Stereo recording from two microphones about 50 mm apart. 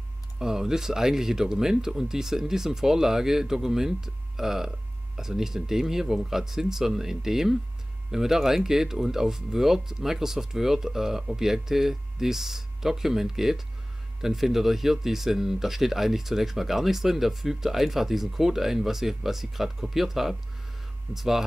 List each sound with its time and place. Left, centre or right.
0.4 s speech: centre